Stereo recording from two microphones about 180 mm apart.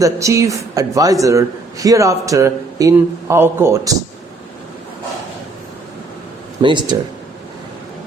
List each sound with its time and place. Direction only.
0.0 s a man's voice: 15° right (ahead or behind)
6.6 s speech: 25° right (ahead or behind)